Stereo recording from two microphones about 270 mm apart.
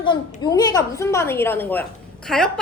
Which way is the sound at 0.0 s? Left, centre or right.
Centre.